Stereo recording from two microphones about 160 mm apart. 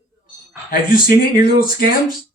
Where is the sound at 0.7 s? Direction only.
65° left (ahead or behind).